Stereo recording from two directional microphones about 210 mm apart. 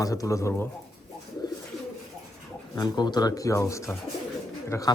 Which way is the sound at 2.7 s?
20° left (ahead or behind).